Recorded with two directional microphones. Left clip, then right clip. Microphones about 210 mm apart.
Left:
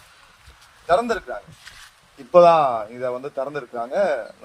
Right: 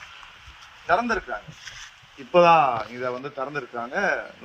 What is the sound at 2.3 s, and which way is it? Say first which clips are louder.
Speech: left 3 dB; 55° left (ahead or behind).